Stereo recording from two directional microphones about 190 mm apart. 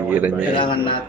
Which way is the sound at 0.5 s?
25° left (ahead or behind).